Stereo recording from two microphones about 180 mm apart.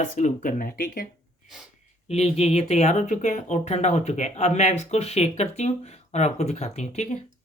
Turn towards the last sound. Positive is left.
turn(degrees=40)  # may be behind; listen again after turning